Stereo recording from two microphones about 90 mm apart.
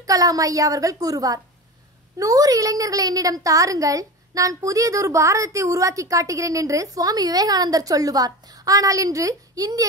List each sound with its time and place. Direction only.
0.0 s a child's voice: 40° right (ahead or behind)